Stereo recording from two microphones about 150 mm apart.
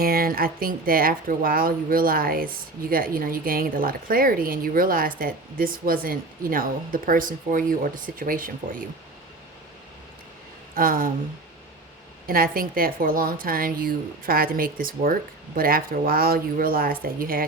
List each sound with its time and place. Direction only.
0.0 s a woman's voice: 75° right (ahead or behind)
10.8 s a woman's voice: 70° right (ahead or behind)
12.2 s a woman's voice: 75° right (ahead or behind)